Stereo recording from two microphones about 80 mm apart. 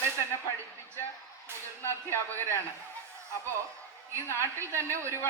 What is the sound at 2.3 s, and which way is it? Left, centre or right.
Speech, right.